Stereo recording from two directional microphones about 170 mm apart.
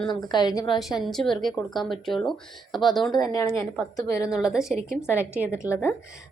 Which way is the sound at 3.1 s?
20° left (ahead or behind).